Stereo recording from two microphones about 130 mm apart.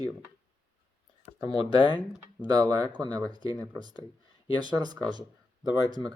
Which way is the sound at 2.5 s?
30° right (ahead or behind).